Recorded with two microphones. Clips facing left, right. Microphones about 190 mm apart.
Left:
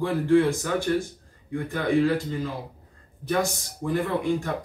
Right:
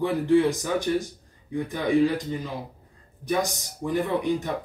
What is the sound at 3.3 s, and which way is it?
Speech, 15° right (ahead or behind).